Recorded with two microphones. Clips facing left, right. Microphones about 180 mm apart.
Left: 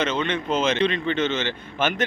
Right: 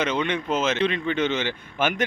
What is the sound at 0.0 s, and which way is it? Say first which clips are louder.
A man's voice: even; 15° right (ahead or behind).